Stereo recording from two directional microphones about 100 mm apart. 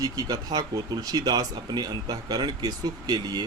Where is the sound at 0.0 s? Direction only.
40° right (ahead or behind).